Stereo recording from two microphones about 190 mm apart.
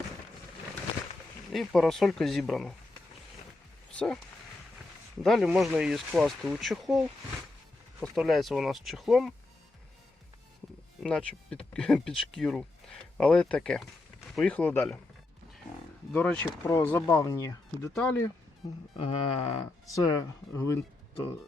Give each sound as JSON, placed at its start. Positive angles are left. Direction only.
{"t": 1.5, "sound": "speech", "side_deg": 0}
{"t": 3.9, "sound": "speech", "side_deg": 5}
{"t": 5.2, "sound": "speech", "side_deg": 0}
{"t": 8.0, "sound": "speech", "side_deg": 0}
{"t": 11.0, "sound": "speech", "side_deg": 5}
{"t": 16.1, "sound": "speech", "side_deg": 5}
{"t": 18.6, "sound": "speech", "side_deg": 35}
{"t": 18.9, "sound": "music", "side_deg": 30}
{"t": 19.9, "sound": "speech", "side_deg": 15}